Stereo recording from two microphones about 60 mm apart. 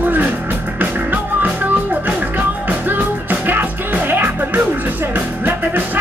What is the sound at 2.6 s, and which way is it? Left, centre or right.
Music, right.